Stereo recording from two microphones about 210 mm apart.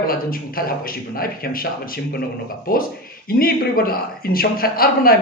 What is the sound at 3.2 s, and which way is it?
A man's voice, 45° left (ahead or behind).